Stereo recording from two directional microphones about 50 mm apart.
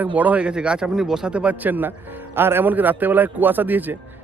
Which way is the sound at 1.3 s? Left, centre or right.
Right.